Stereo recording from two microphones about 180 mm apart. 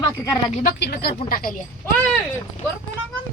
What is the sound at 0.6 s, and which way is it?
Speech, 60° left (ahead or behind).